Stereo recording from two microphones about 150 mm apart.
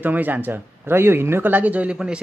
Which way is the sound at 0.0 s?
10° right (ahead or behind).